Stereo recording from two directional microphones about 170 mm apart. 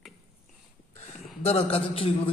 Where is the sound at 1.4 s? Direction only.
35° left (ahead or behind).